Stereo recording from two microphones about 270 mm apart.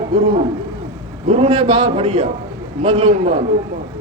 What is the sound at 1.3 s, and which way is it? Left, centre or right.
A man's voice, right.